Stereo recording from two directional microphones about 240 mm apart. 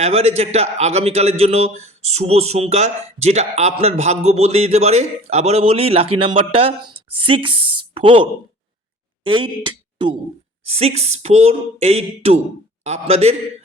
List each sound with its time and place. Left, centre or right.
0.0 s a man's voice: right